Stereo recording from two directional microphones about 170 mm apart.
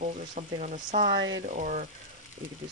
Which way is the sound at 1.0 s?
80° right.